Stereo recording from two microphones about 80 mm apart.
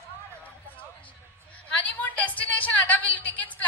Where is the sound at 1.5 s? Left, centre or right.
Centre.